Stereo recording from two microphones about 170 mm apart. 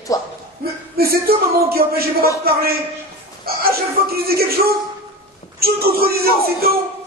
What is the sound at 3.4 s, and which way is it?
Speech, 65° right (ahead or behind).